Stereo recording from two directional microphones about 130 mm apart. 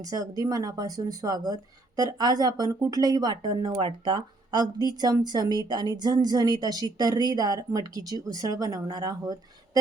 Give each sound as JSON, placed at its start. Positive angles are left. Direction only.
{"t": 0.0, "sound": "a woman's voice", "side_deg": -30}